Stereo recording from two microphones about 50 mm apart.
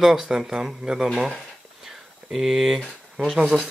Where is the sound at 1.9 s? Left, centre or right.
Centre.